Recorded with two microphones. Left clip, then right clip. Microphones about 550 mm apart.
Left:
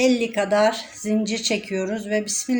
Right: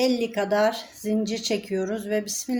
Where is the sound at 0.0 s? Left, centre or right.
Right.